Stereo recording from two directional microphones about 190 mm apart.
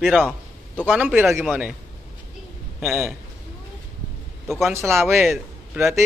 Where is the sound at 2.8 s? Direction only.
10° right (ahead or behind).